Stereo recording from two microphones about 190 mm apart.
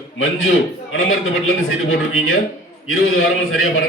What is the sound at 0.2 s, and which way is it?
A man's voice, 90° left.